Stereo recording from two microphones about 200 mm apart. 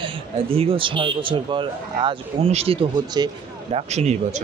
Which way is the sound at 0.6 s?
25° right (ahead or behind).